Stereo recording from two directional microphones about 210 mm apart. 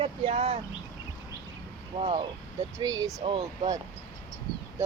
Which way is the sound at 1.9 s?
25° right (ahead or behind).